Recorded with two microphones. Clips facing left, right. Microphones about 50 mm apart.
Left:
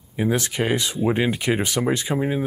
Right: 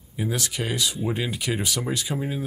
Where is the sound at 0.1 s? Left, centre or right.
Left.